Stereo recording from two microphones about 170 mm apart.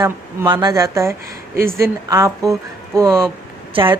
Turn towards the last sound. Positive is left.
turn(degrees=-30)  # may be behind; listen again after turning